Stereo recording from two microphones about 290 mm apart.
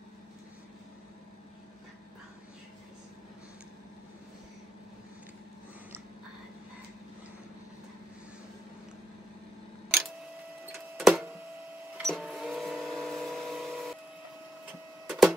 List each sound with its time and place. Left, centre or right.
10.6 s printer: centre
15.0 s printer: centre